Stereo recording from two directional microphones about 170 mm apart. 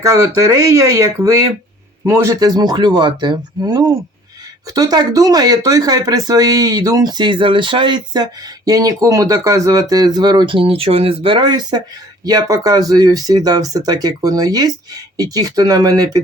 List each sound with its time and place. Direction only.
0.0 s speech: 20° right (ahead or behind)